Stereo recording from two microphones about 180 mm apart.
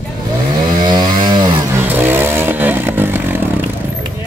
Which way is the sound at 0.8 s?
25° right (ahead or behind).